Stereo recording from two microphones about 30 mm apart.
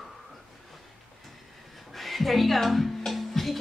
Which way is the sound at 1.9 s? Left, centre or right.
Centre.